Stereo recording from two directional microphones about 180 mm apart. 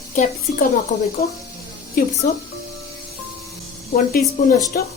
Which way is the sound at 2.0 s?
50° left (ahead or behind).